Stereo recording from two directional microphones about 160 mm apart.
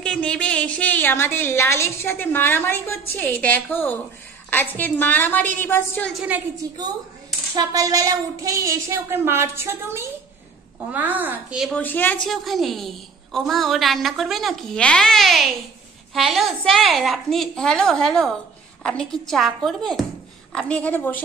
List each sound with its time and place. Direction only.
0.0 s a woman's voice: 5° left (ahead or behind)
6.1 s speech: 10° right (ahead or behind)
6.6 s a child's voice: 25° right (ahead or behind); by 11.8 s 5° right (ahead or behind)
11.8 s a woman's voice: 10° left (ahead or behind)